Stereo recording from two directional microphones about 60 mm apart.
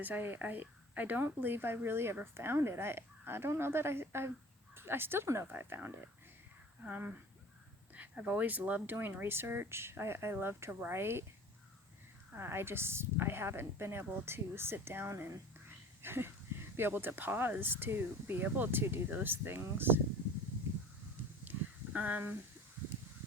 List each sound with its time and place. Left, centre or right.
0.0 s a woman's voice: right
12.3 s a woman's voice: right
16.0 s a sound: right
16.7 s a woman's voice: right
21.5 s a sound: right
21.9 s speech: right